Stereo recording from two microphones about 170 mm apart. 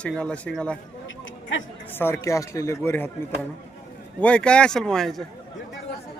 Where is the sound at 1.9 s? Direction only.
15° left (ahead or behind).